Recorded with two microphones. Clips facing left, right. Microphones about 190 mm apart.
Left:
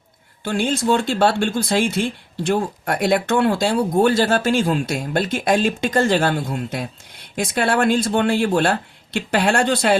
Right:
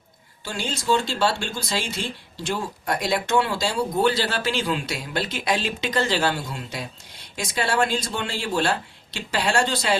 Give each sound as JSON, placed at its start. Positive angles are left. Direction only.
{"t": 0.4, "sound": "speech", "side_deg": 55}